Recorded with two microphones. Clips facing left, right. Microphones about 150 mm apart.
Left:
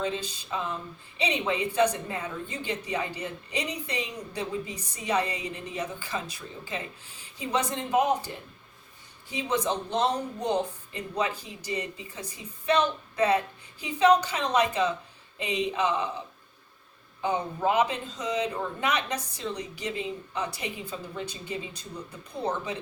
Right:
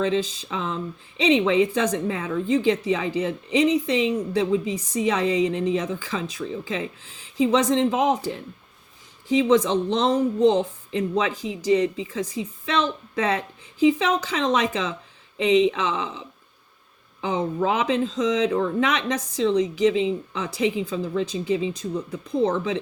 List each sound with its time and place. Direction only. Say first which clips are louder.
0.0 s speech: right 8 dB; 90° right